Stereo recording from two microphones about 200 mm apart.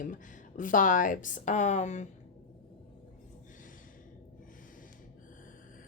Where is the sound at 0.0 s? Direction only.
40° left (ahead or behind).